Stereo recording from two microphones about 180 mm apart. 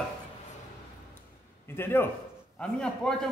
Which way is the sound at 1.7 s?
10° left (ahead or behind).